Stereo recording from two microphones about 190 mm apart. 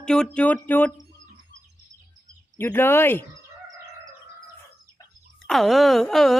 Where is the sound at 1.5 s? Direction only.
65° right (ahead or behind).